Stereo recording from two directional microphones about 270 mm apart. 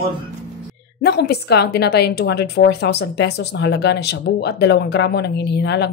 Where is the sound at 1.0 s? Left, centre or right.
Left.